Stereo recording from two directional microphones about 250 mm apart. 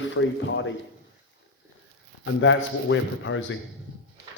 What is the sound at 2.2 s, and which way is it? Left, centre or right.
A man's voice, left.